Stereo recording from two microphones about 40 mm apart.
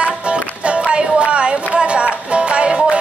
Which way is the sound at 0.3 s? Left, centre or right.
Right.